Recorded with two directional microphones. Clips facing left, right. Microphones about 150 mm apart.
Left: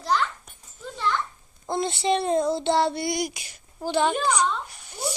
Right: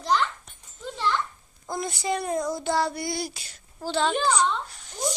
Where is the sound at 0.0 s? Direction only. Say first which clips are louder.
Even; 5° left (ahead or behind).